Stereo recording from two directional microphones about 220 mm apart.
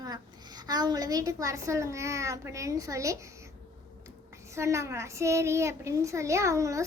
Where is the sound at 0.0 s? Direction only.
15° right (ahead or behind).